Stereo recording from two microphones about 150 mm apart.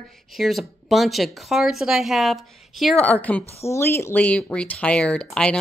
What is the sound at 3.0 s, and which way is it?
Speech, 10° left (ahead or behind).